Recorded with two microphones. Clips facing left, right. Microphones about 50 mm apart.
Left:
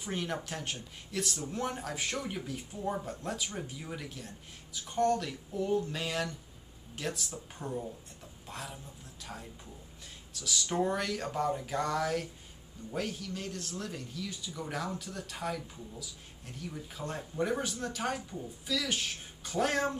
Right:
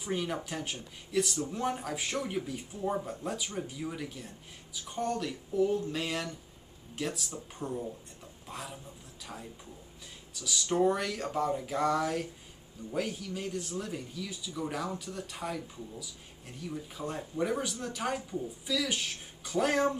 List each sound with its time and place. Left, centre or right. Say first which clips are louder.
0.2 s a man's voice: right 2 dB; centre